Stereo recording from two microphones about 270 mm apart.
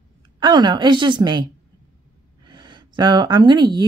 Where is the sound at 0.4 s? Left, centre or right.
Centre.